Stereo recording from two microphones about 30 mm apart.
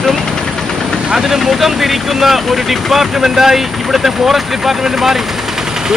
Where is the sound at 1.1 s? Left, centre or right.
Centre.